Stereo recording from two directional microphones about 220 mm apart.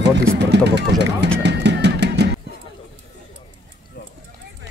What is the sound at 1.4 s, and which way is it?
Music, 50° right (ahead or behind).